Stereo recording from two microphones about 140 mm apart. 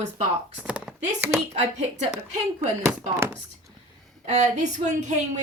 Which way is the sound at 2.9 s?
10° right (ahead or behind).